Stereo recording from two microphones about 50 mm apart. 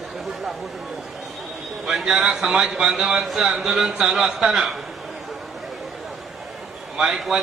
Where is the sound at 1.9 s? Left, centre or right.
Centre.